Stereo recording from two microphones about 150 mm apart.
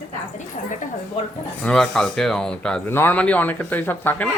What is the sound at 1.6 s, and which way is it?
Speech, 5° left (ahead or behind).